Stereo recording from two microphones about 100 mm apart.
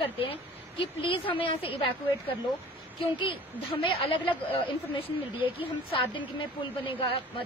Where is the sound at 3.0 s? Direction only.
60° left (ahead or behind).